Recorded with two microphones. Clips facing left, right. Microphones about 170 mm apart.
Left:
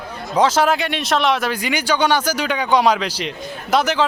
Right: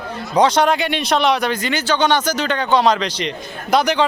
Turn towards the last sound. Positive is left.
turn(degrees=0)  # may be behind; listen again after turning